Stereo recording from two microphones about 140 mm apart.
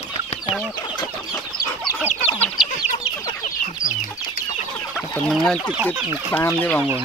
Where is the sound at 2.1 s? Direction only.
45° left (ahead or behind).